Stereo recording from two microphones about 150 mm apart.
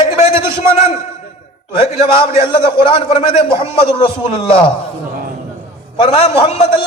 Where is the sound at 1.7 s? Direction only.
40° left (ahead or behind).